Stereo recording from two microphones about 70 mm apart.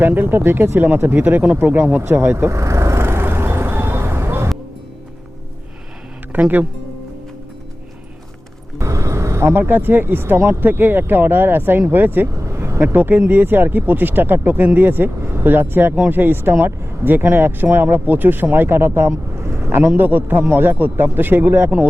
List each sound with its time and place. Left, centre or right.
0.0 s speech: right
2.5 s vehicle: right
6.3 s speech: right
8.8 s speech: right
12.4 s speech: right
20.0 s speech: right